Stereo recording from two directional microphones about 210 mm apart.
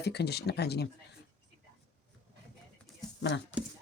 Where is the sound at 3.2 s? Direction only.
55° left (ahead or behind).